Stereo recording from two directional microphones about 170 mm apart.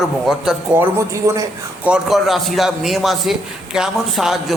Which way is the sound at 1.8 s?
5° right (ahead or behind).